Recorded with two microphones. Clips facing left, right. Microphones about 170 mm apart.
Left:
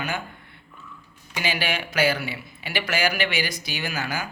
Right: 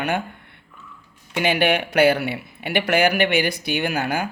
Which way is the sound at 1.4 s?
60° right (ahead or behind).